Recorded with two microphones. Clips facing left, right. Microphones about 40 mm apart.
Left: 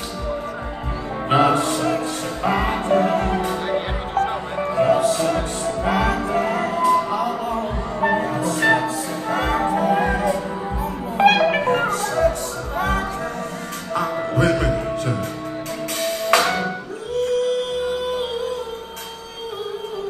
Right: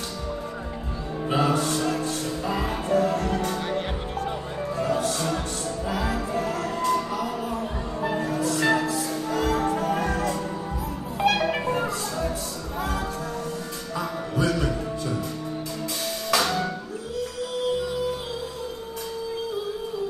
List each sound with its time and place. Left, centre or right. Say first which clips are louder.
1.3 s music: left 7 dB; left
1.7 s music: left 4 dB; left
2.4 s music: left 9 dB; left
4.1 s music: left 8 dB; left
4.7 s music: left 9 dB; left
5.0 s music: left 7 dB; centre
5.7 s music: left 8 dB; left
6.7 s music: left 7 dB; centre
7.4 s music: left 5 dB; left
9.6 s music: left 6 dB; centre
11.1 s music: left 8 dB; left
17.1 s music: left 11 dB; left